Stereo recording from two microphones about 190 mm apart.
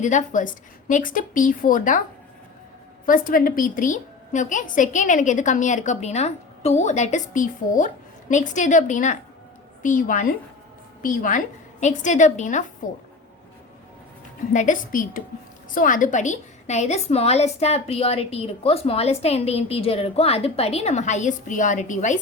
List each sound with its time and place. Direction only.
0.0 s speech: 40° left (ahead or behind)
3.1 s a woman's voice: 45° left (ahead or behind)
14.5 s a woman's voice: 45° left (ahead or behind)